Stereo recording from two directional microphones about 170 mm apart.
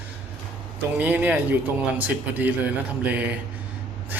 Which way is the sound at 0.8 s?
10° right (ahead or behind).